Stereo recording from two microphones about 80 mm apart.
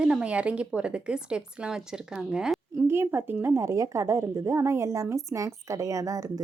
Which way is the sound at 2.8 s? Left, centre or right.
Right.